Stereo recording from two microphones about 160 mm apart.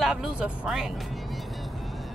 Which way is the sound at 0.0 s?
5° right (ahead or behind).